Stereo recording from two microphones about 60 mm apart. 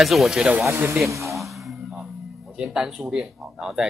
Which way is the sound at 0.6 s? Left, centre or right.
Right.